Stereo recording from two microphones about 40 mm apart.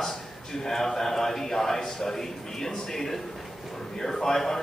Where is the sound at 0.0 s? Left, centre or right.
Centre.